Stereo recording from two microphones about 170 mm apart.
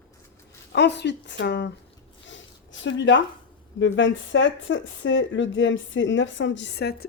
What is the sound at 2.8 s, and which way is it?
Speech, 90° left.